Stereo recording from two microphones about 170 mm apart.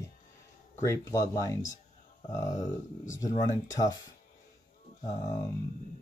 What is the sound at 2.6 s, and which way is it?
Speech, 45° left (ahead or behind).